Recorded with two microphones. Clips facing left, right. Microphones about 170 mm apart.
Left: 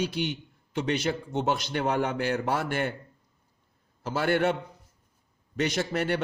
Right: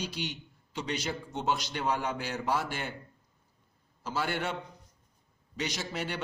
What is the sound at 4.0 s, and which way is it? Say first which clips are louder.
Speech: left 8 dB; 55° left (ahead or behind).